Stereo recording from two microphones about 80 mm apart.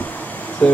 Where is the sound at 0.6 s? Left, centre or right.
Centre.